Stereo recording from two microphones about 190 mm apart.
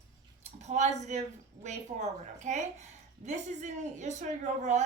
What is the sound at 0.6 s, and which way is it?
A woman's voice, 40° right (ahead or behind).